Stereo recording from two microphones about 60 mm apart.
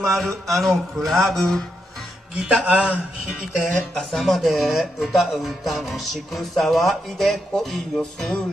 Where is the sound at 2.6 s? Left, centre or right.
Right.